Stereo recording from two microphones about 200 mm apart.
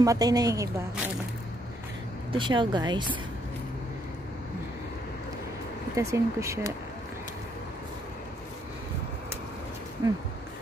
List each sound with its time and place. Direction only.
0.0 s a woman's voice: 15° right (ahead or behind)
2.3 s speech: 25° right (ahead or behind)
5.9 s a woman's voice: 15° right (ahead or behind)